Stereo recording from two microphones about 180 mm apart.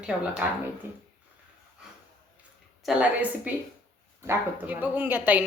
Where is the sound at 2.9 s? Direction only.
5° right (ahead or behind).